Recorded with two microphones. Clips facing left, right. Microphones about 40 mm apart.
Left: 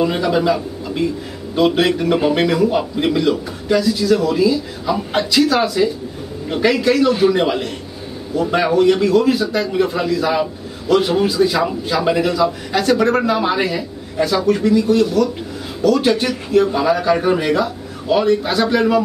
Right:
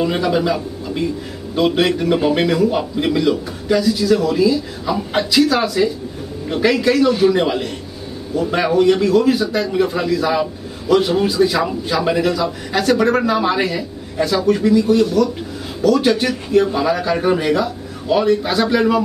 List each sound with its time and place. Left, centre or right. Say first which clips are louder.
0.0 s a man's voice: left 1 dB; centre